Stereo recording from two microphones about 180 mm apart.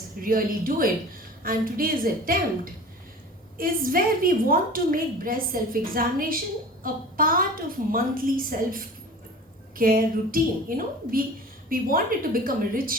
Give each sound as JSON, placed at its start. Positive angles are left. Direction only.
{"t": 0.2, "sound": "a woman's voice", "side_deg": -50}
{"t": 3.6, "sound": "a woman's voice", "side_deg": -50}